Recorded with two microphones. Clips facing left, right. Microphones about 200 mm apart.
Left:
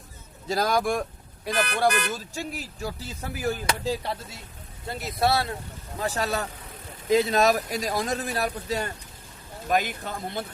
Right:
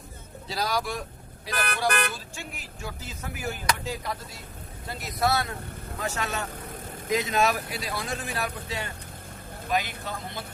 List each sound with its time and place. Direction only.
0.4 s speech: 50° left (ahead or behind)
1.9 s speech: 55° right (ahead or behind)
2.1 s speech: 40° left (ahead or behind)
3.7 s chop: 30° left (ahead or behind)
6.0 s speech: 35° left (ahead or behind)
9.7 s speech: 50° left (ahead or behind)